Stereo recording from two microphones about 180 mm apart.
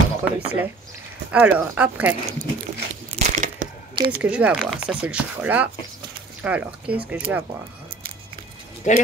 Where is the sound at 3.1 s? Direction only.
45° right (ahead or behind).